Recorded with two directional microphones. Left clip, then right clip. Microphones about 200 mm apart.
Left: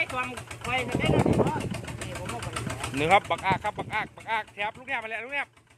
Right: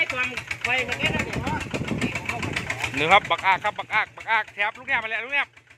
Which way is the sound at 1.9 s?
60° left (ahead or behind).